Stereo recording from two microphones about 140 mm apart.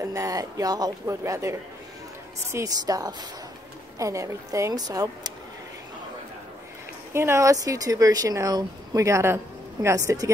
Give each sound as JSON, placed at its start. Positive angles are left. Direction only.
{"t": 0.0, "sound": "speech", "side_deg": -20}
{"t": 7.1, "sound": "speech", "side_deg": -20}